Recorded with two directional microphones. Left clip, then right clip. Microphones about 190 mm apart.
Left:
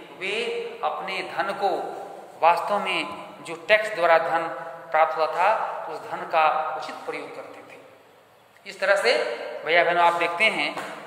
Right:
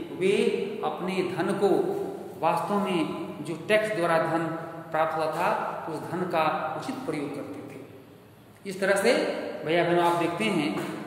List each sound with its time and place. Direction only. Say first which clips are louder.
0.2 s a man's voice: right 3 dB; 10° right (ahead or behind)
2.4 s a man's voice: left 6 dB; 15° left (ahead or behind); by 7.2 s 10° right (ahead or behind)
8.6 s speech: left 3 dB; 10° right (ahead or behind)
9.7 s a man's voice: left 5 dB; 10° left (ahead or behind)